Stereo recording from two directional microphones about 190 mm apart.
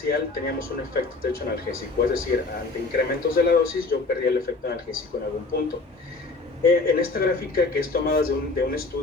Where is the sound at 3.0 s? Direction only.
55° left (ahead or behind).